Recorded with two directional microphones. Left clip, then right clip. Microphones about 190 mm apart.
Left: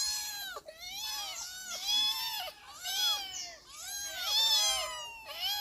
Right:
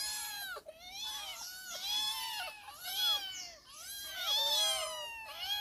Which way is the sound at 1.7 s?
15° left (ahead or behind).